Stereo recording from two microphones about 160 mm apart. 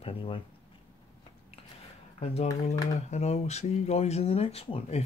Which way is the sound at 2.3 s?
40° left (ahead or behind).